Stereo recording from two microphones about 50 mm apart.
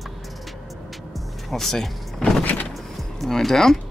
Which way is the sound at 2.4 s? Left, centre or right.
Left.